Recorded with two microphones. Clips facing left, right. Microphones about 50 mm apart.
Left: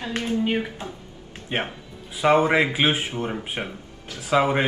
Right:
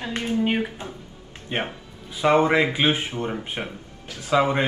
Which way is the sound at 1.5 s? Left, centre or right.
Centre.